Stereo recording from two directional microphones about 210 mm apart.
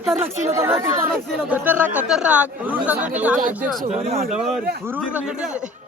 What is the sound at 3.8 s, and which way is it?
Speech, 35° right (ahead or behind).